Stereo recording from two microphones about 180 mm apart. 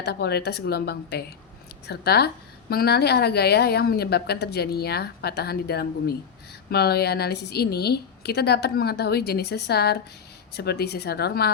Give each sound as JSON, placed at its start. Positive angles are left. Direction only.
{"t": 0.0, "sound": "a woman's voice", "side_deg": 65}